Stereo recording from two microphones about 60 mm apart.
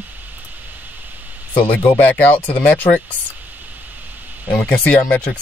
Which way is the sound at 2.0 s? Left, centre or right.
Left.